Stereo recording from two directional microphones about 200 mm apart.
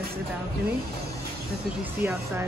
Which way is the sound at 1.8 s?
10° right (ahead or behind).